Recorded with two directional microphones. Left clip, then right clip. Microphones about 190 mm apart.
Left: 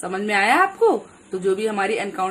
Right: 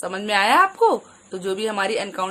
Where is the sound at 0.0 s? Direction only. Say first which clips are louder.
Even; 30° right (ahead or behind).